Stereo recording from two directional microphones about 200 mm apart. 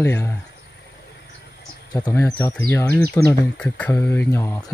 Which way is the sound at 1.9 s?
15° left (ahead or behind).